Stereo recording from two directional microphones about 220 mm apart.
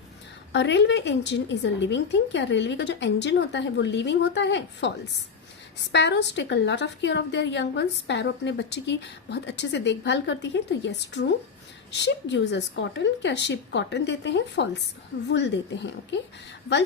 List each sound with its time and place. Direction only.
0.5 s a woman's voice: 50° left (ahead or behind)
5.9 s a woman's voice: 50° left (ahead or behind)